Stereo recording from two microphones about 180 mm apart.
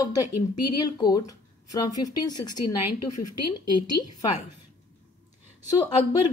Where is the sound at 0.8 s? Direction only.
20° left (ahead or behind).